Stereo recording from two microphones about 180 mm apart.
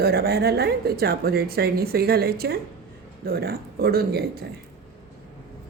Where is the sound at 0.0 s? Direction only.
60° right (ahead or behind).